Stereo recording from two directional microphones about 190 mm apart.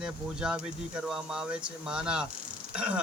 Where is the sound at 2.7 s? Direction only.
5° right (ahead or behind).